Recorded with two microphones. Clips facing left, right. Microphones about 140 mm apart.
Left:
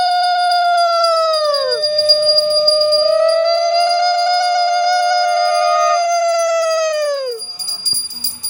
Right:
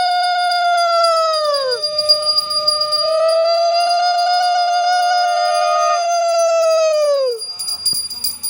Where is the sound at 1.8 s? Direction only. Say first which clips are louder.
Left 6 dB; 75° left (ahead or behind).